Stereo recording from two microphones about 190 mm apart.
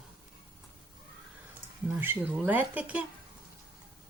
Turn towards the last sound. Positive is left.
turn(degrees=-10)  # may be behind; listen again after turning